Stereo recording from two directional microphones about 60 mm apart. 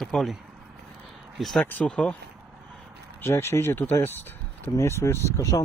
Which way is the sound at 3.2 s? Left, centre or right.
Left.